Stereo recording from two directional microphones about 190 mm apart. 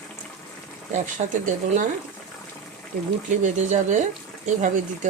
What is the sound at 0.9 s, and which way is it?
Speech, 40° right (ahead or behind).